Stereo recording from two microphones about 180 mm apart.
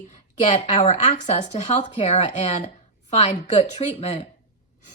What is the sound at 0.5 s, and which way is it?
Speech, 40° left (ahead or behind).